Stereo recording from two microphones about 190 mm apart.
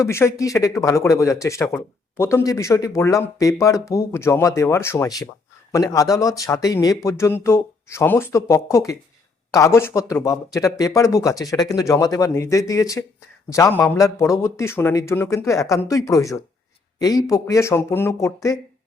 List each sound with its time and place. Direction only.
0.0 s speech: 15° left (ahead or behind)